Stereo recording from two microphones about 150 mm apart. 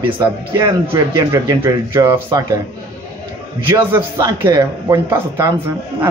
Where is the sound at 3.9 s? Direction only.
15° right (ahead or behind).